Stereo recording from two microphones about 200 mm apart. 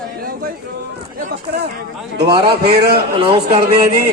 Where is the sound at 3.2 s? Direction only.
25° right (ahead or behind).